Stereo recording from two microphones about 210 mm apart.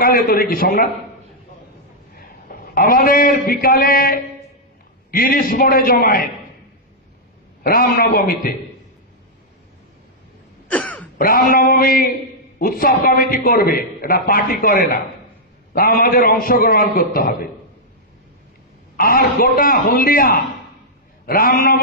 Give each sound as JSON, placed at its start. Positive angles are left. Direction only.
{"t": 0.0, "sound": "a man's voice", "side_deg": 45}
{"t": 2.1, "sound": "a man's voice", "side_deg": 45}
{"t": 7.6, "sound": "a man's voice", "side_deg": 45}
{"t": 10.7, "sound": "throat clearing", "side_deg": 5}
{"t": 11.1, "sound": "a man's voice", "side_deg": 45}
{"t": 18.9, "sound": "a man's voice", "side_deg": 45}